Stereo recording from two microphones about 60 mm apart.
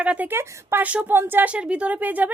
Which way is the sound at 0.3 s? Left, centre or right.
Right.